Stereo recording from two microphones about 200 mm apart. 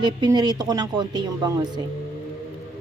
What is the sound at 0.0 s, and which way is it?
Speech, 20° right (ahead or behind).